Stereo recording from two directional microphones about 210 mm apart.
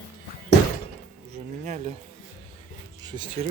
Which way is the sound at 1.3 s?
35° right (ahead or behind).